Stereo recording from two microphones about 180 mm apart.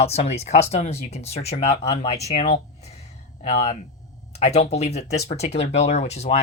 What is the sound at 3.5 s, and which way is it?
Speech, 35° left (ahead or behind).